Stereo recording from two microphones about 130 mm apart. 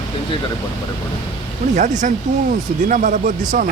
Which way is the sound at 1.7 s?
70° right (ahead or behind).